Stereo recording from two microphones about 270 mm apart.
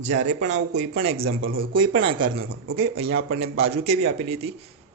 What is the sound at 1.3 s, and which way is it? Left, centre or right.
Speech, right.